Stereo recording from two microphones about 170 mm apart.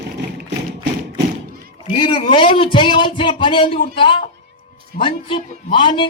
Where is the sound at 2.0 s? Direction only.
30° left (ahead or behind).